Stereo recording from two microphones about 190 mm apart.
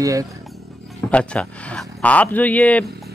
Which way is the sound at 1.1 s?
5° left (ahead or behind).